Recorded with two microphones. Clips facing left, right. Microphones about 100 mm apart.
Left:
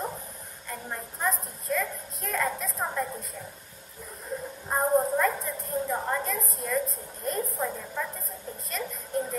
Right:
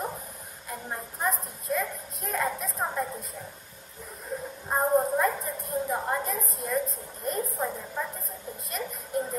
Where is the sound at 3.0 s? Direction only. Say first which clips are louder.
Even; centre (ahead or behind).